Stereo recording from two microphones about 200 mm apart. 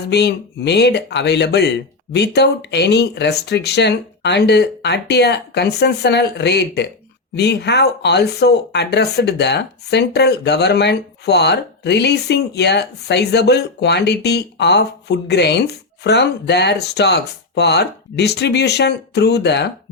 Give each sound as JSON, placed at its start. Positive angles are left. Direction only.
{"t": 0.1, "sound": "speech", "side_deg": 55}